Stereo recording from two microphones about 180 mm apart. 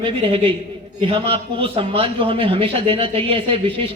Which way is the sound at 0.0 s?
30° right (ahead or behind).